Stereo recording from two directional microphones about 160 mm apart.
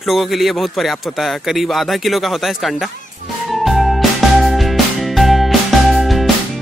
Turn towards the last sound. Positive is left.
turn(degrees=0)  # may be behind; listen again after turning